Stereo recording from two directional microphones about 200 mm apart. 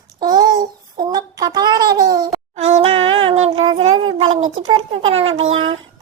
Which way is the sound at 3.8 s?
90° right.